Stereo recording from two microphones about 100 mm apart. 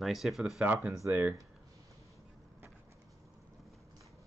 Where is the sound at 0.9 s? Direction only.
30° right (ahead or behind).